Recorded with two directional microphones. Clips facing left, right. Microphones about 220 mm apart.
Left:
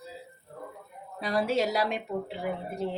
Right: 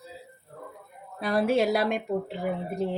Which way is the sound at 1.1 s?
55° right (ahead or behind).